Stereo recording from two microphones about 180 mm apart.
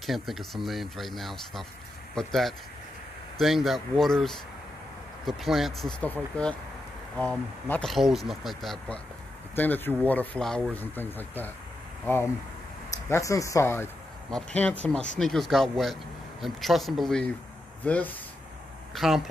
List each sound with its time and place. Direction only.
0.0 s speech: centre (ahead or behind)
12.9 s speech: 20° left (ahead or behind); by 19.2 s centre (ahead or behind)